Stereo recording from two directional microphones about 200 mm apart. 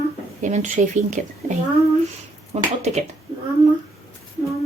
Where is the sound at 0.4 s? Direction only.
35° right (ahead or behind).